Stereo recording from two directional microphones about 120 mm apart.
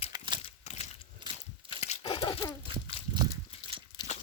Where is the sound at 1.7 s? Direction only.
65° left (ahead or behind).